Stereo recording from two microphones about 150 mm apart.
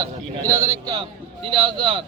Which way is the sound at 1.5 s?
35° right (ahead or behind).